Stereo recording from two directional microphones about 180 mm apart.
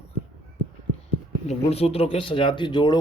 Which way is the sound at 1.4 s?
35° left (ahead or behind).